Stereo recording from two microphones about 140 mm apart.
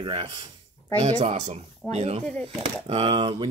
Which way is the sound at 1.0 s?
50° right (ahead or behind).